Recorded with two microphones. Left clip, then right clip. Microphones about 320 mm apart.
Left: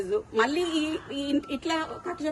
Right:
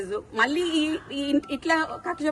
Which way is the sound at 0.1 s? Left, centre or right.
Centre.